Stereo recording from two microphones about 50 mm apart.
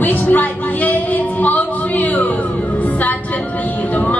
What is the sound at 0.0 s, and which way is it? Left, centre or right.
Music, left.